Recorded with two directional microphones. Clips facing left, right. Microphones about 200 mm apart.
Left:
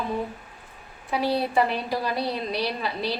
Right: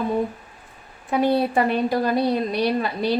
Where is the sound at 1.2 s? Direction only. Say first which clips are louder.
Right 4 dB; 50° right (ahead or behind).